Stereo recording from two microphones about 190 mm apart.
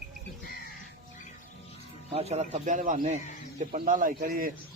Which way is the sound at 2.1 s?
35° right (ahead or behind).